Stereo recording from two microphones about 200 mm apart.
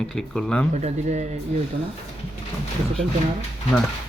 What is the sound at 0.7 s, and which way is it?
Speech, 35° right (ahead or behind).